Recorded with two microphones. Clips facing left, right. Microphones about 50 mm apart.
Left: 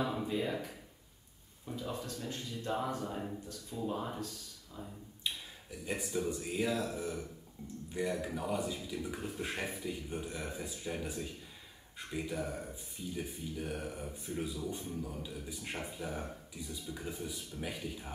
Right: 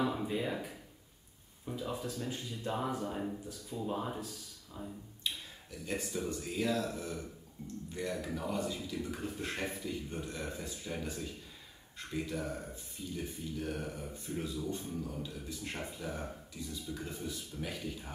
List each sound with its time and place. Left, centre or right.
0.0 s a sound: centre
1.7 s speech: centre
5.2 s speech: centre